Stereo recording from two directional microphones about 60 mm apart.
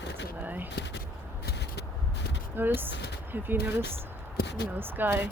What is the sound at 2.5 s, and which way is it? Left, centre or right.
Speech, right.